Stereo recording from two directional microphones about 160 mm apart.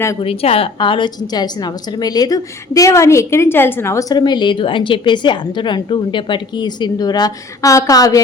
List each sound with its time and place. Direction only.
0.2 s a woman's voice: 35° left (ahead or behind)